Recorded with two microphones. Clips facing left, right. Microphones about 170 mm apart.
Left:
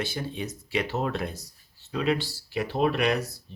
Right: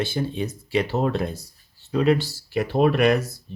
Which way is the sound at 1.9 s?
40° right (ahead or behind).